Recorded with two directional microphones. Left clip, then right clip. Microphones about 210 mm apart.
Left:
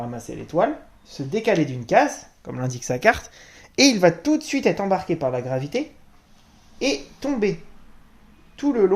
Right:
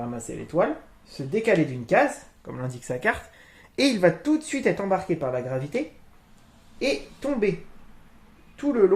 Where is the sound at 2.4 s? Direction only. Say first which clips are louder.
Left 8 dB; 40° left (ahead or behind).